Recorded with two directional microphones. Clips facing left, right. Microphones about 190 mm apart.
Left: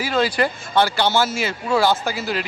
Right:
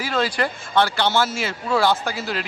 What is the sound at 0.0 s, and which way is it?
Speech, 5° left (ahead or behind).